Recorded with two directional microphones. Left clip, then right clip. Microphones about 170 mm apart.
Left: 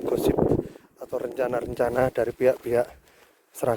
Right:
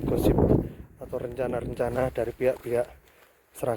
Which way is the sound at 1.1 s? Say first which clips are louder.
Left 3 dB; 40° left (ahead or behind).